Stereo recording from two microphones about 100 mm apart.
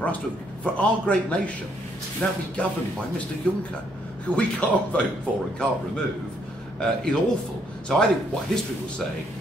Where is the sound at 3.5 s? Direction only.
10° left (ahead or behind).